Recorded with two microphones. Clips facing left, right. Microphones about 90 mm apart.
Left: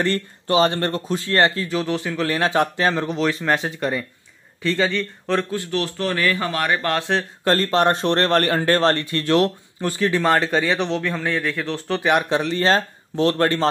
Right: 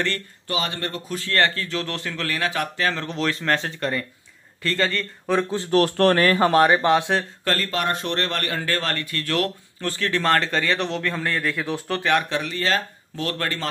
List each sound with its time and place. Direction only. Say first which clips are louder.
0.5 s speech: left 9 dB; 35° left (ahead or behind)
1.1 s speech: left 3 dB; 20° left (ahead or behind)
2.2 s a man's voice: left 6 dB; 30° left (ahead or behind)
3.1 s speech: left 3 dB; 5° left (ahead or behind)
5.2 s speech: right 1 dB; 5° right (ahead or behind)
5.7 s speech: right 6 dB; 50° right (ahead or behind)
6.7 s speech: right 4 dB; 20° right (ahead or behind)
7.4 s a man's voice: left 11 dB; 30° left (ahead or behind); by 11.6 s centre (ahead or behind)
11.6 s speech: left 2 dB; 10° right (ahead or behind)
12.0 s a man's voice: left 3 dB; 20° left (ahead or behind)
12.4 s speech: left 5 dB; 35° left (ahead or behind)